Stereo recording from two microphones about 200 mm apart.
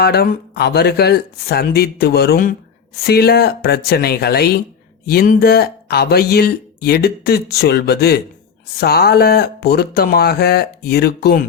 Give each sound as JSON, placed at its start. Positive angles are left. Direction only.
{"t": 0.0, "sound": "speech", "side_deg": 55}